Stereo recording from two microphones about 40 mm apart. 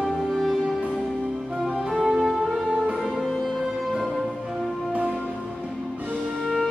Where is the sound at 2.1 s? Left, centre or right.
Centre.